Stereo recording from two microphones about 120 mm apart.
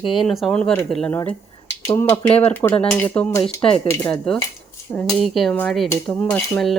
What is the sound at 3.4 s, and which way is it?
Speech, 50° left (ahead or behind).